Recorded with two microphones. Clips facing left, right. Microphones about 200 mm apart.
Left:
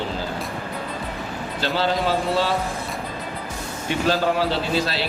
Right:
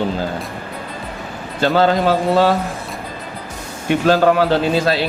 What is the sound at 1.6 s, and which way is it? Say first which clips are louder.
Speech: right 8 dB; 50° right (ahead or behind).